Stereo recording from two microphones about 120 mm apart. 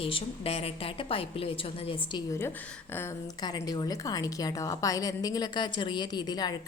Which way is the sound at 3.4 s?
35° left (ahead or behind).